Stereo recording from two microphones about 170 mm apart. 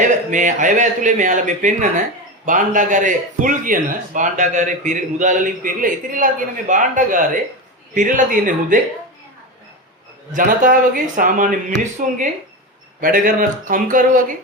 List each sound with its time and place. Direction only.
0.0 s speech: 45° right (ahead or behind)
10.3 s speech: 50° right (ahead or behind)